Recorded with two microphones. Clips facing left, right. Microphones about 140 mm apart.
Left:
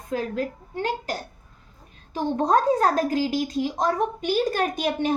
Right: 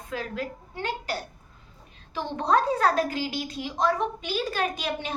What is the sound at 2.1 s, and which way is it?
A woman's voice, 45° left (ahead or behind).